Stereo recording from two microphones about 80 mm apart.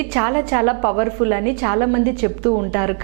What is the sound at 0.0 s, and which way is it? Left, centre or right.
A woman's voice, centre.